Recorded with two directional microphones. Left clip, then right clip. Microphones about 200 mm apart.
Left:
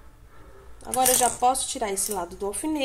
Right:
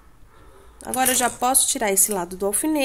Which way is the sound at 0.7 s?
45° right (ahead or behind).